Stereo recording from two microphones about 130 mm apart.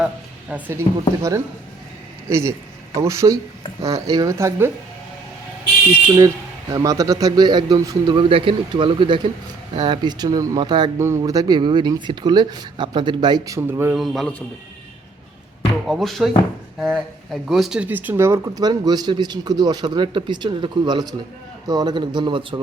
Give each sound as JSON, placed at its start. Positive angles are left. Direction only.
{"t": 0.5, "sound": "speech", "side_deg": -20}
{"t": 2.3, "sound": "speech", "side_deg": -20}
{"t": 6.1, "sound": "speech", "side_deg": -25}
{"t": 10.9, "sound": "speech", "side_deg": -20}
{"t": 13.9, "sound": "a man's voice", "side_deg": 0}
{"t": 15.9, "sound": "a man's voice", "side_deg": 0}